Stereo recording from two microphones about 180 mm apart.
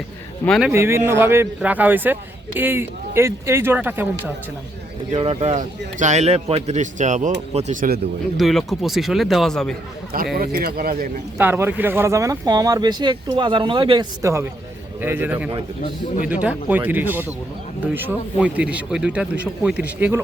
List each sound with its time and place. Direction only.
0.4 s speech: centre (ahead or behind)
0.7 s speech: 15° right (ahead or behind)
5.1 s a man's voice: 30° right (ahead or behind); by 8.0 s 55° right (ahead or behind)
8.4 s speech: centre (ahead or behind)
10.3 s speech: 55° right (ahead or behind)
11.3 s speech: 10° right (ahead or behind)